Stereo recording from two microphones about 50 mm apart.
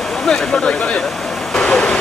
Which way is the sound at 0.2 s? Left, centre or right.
Centre.